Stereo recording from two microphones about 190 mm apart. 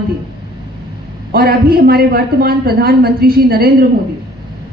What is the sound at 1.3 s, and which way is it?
A woman's voice, 55° right (ahead or behind).